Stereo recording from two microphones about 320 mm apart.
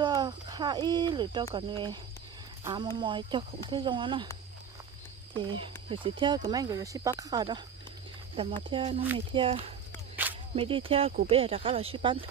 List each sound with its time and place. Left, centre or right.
0.0 s speech: centre
5.3 s speech: centre
8.6 s speech: centre